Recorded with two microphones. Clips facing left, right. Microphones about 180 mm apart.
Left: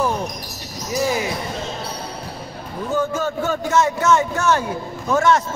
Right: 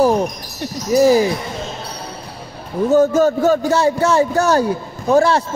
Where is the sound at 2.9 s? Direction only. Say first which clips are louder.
Right 9 dB; 40° right (ahead or behind).